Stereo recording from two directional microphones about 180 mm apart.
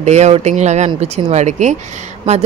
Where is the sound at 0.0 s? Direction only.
40° right (ahead or behind).